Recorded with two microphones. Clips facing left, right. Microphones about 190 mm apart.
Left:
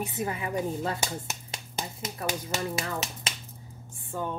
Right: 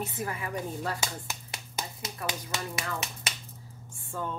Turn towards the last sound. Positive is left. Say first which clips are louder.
# left 2 dB
turn(degrees=15)  # may be behind; listen again after turning